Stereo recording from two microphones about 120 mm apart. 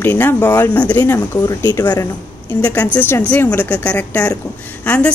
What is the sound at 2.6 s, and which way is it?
Speech, 10° left (ahead or behind).